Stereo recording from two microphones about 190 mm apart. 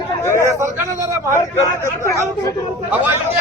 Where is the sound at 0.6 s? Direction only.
15° right (ahead or behind).